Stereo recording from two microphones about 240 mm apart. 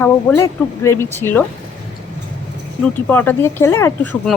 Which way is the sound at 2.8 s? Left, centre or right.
Centre.